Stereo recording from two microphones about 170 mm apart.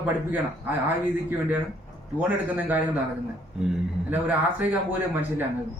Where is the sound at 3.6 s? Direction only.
5° right (ahead or behind).